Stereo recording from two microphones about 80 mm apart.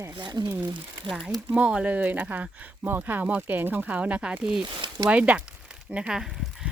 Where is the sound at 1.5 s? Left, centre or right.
Centre.